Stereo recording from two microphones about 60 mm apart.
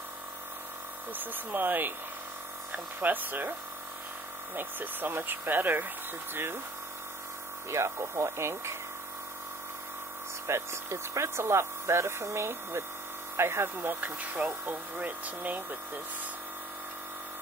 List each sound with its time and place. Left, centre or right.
1.1 s speech: right
4.6 s speech: right
7.7 s speech: right
10.4 s speech: right